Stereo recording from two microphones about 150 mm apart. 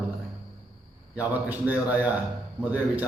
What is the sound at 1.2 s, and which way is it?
Speech, 10° right (ahead or behind).